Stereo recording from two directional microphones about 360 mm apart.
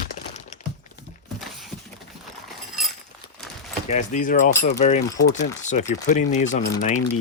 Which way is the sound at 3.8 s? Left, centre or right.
Centre.